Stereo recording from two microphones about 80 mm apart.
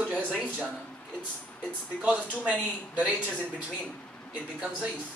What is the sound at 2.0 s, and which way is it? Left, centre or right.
A man's voice, centre.